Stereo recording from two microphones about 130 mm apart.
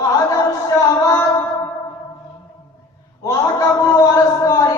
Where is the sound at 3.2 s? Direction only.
25° left (ahead or behind).